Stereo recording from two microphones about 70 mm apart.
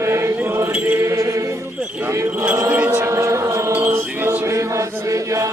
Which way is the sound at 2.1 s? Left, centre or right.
Right.